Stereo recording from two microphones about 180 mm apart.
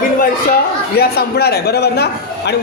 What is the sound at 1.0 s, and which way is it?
A man's voice, 60° left (ahead or behind).